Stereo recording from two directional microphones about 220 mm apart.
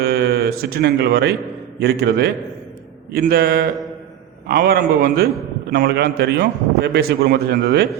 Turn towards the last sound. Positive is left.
turn(degrees=-45)  # may be behind; listen again after turning